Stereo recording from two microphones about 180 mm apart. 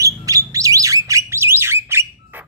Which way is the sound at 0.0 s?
20° right (ahead or behind).